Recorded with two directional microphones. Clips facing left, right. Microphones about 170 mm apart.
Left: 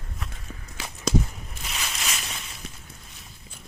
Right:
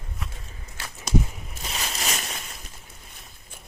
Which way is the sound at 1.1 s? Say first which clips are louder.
Even; 90° left.